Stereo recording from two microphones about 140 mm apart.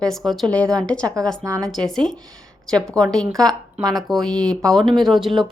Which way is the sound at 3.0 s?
25° right (ahead or behind).